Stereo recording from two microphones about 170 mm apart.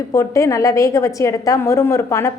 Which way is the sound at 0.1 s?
20° left (ahead or behind).